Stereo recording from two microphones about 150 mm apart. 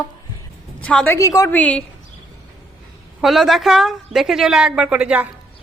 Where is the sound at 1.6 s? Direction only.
10° left (ahead or behind).